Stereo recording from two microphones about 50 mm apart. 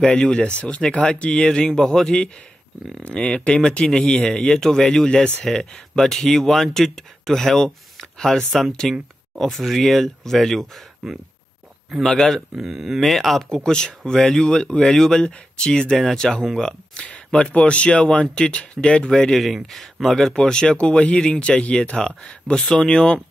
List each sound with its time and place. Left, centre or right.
0.0 s speech: centre
9.4 s speech: centre
12.0 s speech: centre
12.6 s speech: centre
17.5 s speech: left